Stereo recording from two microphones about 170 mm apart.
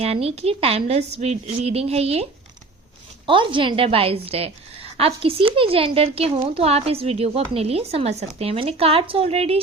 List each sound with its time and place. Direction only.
0.0 s a woman's voice: 35° right (ahead or behind)
3.2 s a woman's voice: 30° right (ahead or behind)